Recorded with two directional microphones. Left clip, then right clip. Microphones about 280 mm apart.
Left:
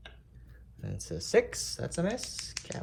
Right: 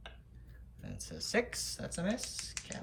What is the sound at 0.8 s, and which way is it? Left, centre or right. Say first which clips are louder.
Speech: left 5 dB; centre.